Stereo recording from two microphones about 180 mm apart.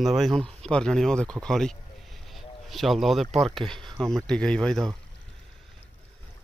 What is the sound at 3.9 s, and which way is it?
Speech, 20° right (ahead or behind).